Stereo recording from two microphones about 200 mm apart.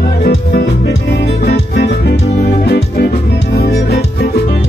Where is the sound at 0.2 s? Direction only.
50° left (ahead or behind).